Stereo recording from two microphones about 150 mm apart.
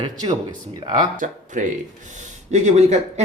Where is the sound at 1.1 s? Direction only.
60° right (ahead or behind).